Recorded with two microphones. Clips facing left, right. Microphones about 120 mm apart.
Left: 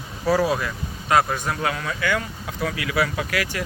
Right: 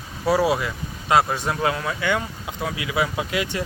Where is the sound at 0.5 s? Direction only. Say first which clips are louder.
Even; 20° right (ahead or behind).